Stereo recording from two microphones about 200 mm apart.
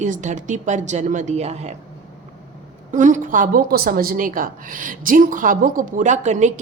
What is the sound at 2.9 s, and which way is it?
A woman's voice, 40° right (ahead or behind).